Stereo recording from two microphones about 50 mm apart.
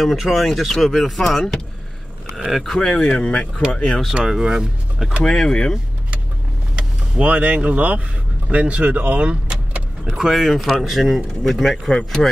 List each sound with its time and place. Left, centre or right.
0.0 s speech: centre
2.5 s speech: centre
2.8 s speech: centre
4.1 s speech: centre
5.2 s speech: centre
6.7 s speech: right
10.1 s speech: centre